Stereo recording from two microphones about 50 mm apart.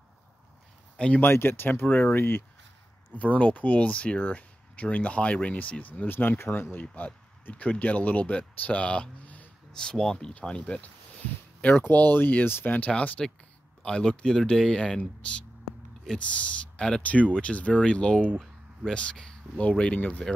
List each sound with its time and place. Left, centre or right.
0.9 s speech: left
1.2 s speech: left
1.9 s speech: left
2.1 s speech: left
3.2 s speech: left
6.8 s speech: left
9.2 s a sound: left
9.7 s speech: centre
10.6 s speech: left
11.7 s speech: left
12.7 s speech: left
13.8 s speech: centre
16.2 s speech: left
17.0 s speech: left